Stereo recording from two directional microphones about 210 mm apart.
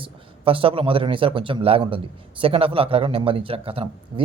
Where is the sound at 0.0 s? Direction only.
25° right (ahead or behind).